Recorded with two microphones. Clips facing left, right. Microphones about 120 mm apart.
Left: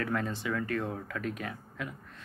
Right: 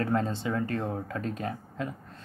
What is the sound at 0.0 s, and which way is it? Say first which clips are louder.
Speech: right 4 dB; 30° right (ahead or behind).